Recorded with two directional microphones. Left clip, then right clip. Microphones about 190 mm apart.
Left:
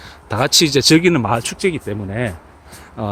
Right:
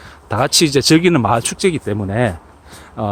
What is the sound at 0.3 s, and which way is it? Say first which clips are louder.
Speech: even; 5° right (ahead or behind).